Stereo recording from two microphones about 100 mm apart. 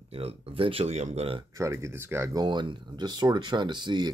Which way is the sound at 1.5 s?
30° right (ahead or behind).